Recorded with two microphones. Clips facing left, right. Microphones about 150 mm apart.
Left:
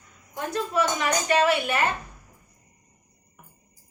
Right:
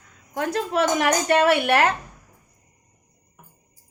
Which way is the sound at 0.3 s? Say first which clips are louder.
Right 3 dB; 85° right.